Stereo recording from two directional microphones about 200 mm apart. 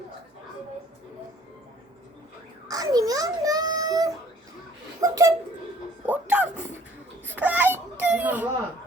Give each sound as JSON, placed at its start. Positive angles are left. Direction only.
{"t": 2.6, "sound": "a sound", "side_deg": -15}
{"t": 4.9, "sound": "speech", "side_deg": -15}
{"t": 6.1, "sound": "music", "side_deg": -5}
{"t": 7.3, "sound": "baby cry", "side_deg": -10}